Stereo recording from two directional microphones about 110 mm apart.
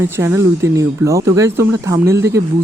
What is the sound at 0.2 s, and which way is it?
Speech, 25° right (ahead or behind).